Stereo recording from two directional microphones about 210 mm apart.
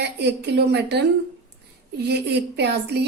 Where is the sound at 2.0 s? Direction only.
50° right (ahead or behind).